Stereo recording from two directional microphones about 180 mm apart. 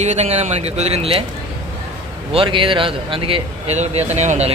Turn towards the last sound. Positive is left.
turn(degrees=-40)  # may be behind; listen again after turning